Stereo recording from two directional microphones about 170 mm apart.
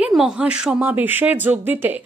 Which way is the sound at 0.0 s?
5° right (ahead or behind).